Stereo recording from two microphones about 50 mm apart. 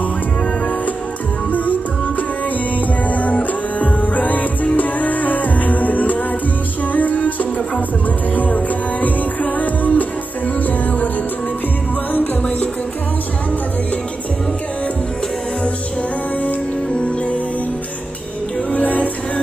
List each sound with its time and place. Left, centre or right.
1.5 s music: left
12.1 s music: left
18.7 s music: left